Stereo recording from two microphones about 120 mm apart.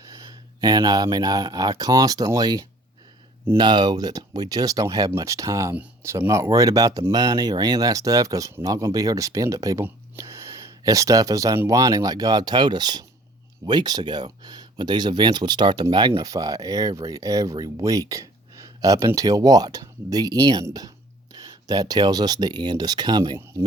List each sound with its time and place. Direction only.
0.1 s speech: 30° right (ahead or behind)